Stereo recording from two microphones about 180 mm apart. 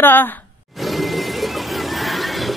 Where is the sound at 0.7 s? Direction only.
Centre (ahead or behind).